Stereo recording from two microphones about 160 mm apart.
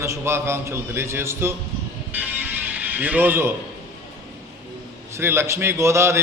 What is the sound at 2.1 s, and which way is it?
Music, 10° right (ahead or behind).